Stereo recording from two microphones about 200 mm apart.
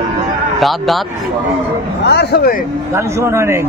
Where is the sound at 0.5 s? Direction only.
Centre (ahead or behind).